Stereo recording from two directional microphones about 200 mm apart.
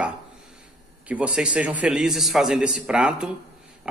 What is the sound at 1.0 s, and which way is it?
A man's voice, 5° right (ahead or behind).